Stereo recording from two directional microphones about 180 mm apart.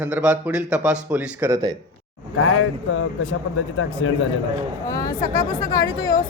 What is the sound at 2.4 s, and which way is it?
Speech, 90° left.